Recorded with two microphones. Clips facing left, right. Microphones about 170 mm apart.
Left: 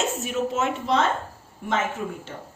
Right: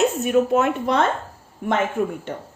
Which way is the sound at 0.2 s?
55° right (ahead or behind).